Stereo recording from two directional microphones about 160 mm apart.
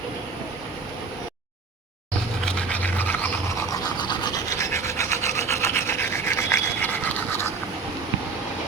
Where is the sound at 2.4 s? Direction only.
5° left (ahead or behind).